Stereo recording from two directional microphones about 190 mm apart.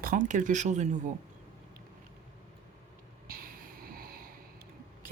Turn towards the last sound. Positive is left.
turn(degrees=-50)  # may be behind; listen again after turning